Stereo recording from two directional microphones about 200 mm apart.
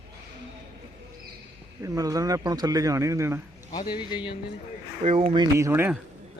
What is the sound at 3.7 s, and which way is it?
Speech, 20° left (ahead or behind).